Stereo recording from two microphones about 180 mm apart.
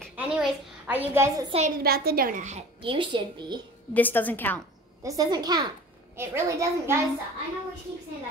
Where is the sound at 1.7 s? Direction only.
60° right (ahead or behind); by 3.6 s 25° right (ahead or behind).